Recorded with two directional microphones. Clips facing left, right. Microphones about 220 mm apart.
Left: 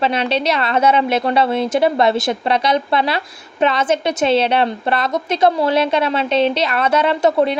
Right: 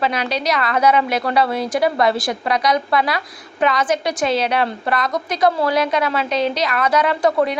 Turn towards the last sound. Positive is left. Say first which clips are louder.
# left 2 dB
turn(degrees=25)  # may be behind; listen again after turning